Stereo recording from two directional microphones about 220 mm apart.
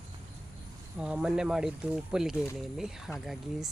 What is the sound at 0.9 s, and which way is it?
Speech, 5° right (ahead or behind).